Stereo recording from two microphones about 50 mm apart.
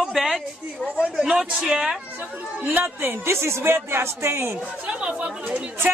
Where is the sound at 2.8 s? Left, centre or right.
Right.